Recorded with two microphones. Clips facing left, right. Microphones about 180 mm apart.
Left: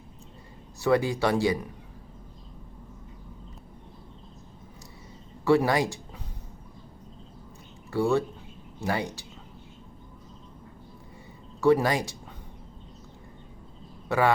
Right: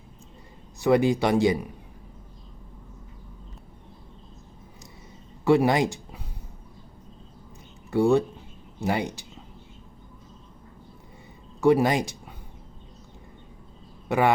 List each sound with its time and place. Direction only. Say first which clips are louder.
0.8 s speech: right 3 dB; 20° right (ahead or behind)
5.5 s speech: right 2 dB; 20° right (ahead or behind)
7.9 s speech: right 4 dB; 20° right (ahead or behind)
11.6 s speech: right 2 dB; 20° right (ahead or behind)
14.1 s speech: right 2 dB; 20° right (ahead or behind)